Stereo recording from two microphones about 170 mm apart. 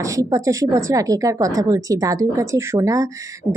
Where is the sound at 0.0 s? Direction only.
20° right (ahead or behind).